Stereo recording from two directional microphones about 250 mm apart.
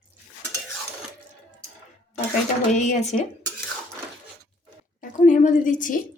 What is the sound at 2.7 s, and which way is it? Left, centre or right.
Speech, left.